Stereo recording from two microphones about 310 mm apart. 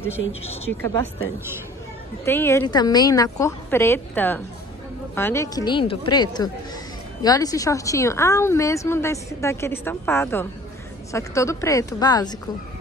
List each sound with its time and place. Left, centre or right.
0.3 s a woman's voice: centre
2.2 s a woman's voice: centre